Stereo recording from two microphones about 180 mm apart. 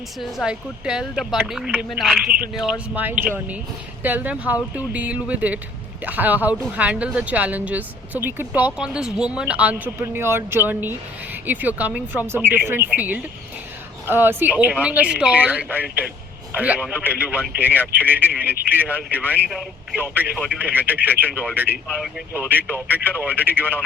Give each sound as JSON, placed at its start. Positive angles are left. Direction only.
{"t": 0.2, "sound": "speech", "side_deg": 0}